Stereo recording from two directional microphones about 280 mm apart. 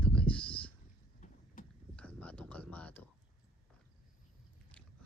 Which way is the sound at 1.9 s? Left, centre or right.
Centre.